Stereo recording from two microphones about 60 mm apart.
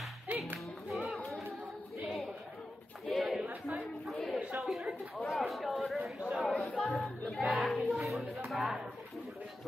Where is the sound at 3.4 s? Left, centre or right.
Right.